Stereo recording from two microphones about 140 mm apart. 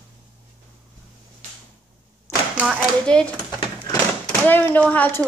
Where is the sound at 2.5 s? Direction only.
10° right (ahead or behind).